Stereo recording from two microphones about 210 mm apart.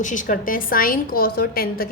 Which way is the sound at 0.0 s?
35° left (ahead or behind).